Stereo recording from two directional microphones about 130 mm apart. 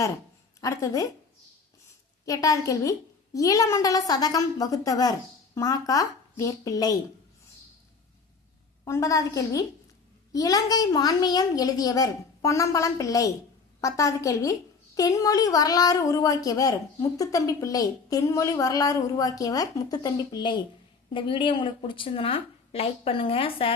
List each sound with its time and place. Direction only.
0.6 s speech: 25° left (ahead or behind)
2.2 s speech: 25° left (ahead or behind)
8.8 s a woman's voice: 25° left (ahead or behind); by 23.7 s 45° left (ahead or behind)